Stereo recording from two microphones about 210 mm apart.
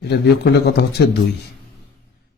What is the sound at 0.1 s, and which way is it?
Speech, 50° left (ahead or behind).